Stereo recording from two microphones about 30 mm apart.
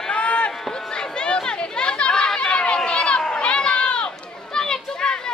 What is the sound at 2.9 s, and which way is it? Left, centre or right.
Run, left.